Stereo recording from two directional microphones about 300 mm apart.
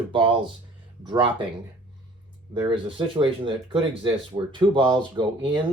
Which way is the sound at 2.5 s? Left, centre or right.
Centre.